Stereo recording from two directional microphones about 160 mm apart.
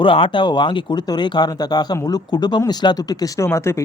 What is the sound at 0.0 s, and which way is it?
Speech, 30° left (ahead or behind).